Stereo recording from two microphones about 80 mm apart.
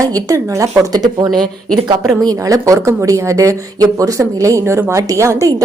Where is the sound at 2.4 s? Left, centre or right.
Right.